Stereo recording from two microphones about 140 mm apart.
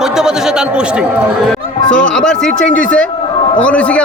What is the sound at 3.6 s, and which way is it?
Speech, 10° left (ahead or behind).